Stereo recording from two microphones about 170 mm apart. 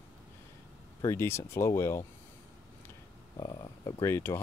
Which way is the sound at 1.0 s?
15° left (ahead or behind).